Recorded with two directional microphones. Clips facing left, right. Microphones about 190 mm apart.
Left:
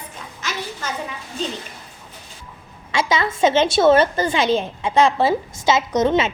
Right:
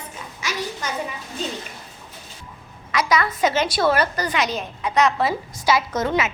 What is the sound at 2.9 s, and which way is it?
A woman's voice, 25° left (ahead or behind).